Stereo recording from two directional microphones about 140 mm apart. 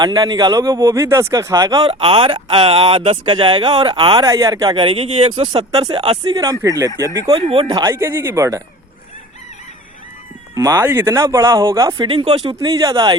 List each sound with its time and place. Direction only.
0.0 s speech: 30° right (ahead or behind)
1.9 s speech: 40° right (ahead or behind)
4.3 s speech: 25° right (ahead or behind)
6.3 s speech: 25° right (ahead or behind)
7.3 s speech: 40° right (ahead or behind)
7.7 s speech: 25° right (ahead or behind)
10.5 s speech: 25° right (ahead or behind)
11.9 s speech: 40° right (ahead or behind)
12.5 s speech: 25° right (ahead or behind)